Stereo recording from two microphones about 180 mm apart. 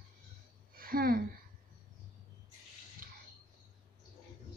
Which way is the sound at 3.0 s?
50° right (ahead or behind).